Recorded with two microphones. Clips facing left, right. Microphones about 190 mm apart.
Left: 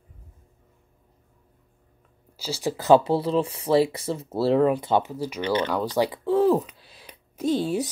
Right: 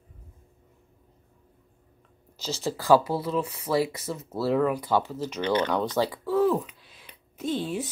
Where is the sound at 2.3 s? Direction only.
10° left (ahead or behind).